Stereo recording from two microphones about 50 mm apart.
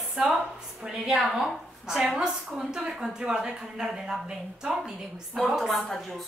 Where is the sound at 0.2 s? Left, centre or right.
Right.